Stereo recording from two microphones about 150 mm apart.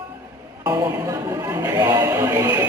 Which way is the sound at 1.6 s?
20° right (ahead or behind).